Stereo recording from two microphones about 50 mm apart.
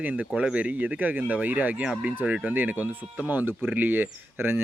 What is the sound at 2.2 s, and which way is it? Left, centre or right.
Speech, right.